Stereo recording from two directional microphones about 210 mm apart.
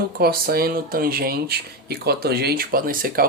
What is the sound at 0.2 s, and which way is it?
Speech, 45° right (ahead or behind).